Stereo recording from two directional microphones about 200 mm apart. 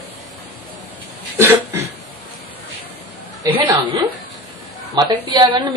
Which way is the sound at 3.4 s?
10° right (ahead or behind).